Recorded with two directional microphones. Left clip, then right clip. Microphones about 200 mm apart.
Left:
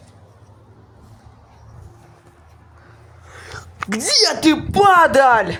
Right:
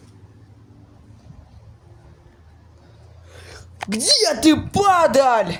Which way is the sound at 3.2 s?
Centre (ahead or behind).